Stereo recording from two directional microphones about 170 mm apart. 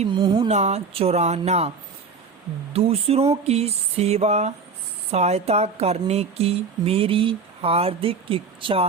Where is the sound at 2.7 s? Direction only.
35° right (ahead or behind).